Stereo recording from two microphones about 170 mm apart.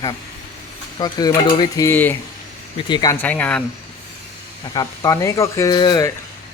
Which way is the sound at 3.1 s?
10° left (ahead or behind).